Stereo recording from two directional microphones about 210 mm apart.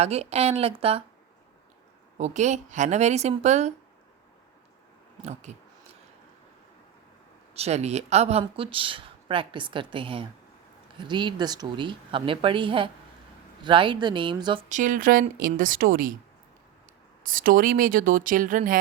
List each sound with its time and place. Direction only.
0.0 s speech: 30° right (ahead or behind)
2.1 s speech: 35° right (ahead or behind)
5.2 s a sound: 35° right (ahead or behind)
7.5 s speech: 30° right (ahead or behind)
14.7 s speech: 40° right (ahead or behind)
17.2 s speech: 40° right (ahead or behind)